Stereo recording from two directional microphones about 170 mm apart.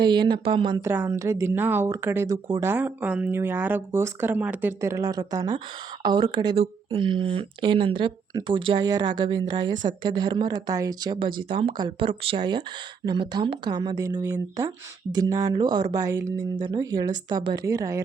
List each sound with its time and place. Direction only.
0.0 s speech: 25° right (ahead or behind)
0.8 s speech: 15° right (ahead or behind)